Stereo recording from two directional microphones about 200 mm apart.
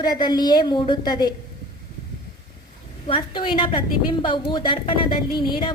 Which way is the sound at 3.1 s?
25° left (ahead or behind).